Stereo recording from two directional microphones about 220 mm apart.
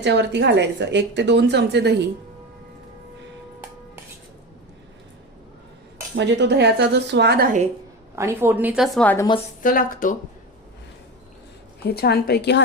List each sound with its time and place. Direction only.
0.0 s a woman's voice: 50° right (ahead or behind)
6.1 s a woman's voice: 50° right (ahead or behind)
8.1 s a woman's voice: 10° right (ahead or behind); by 9.2 s 5° left (ahead or behind)
9.6 s speech: 40° left (ahead or behind)
11.9 s a woman's voice: 45° left (ahead or behind)